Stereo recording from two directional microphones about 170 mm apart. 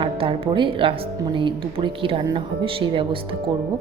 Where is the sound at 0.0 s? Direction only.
30° right (ahead or behind).